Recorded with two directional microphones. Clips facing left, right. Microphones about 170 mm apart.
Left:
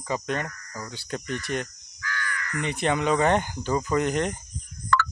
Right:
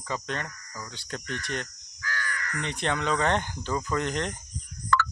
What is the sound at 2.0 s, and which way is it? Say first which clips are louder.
Crow: left 1 dB; 40° right (ahead or behind).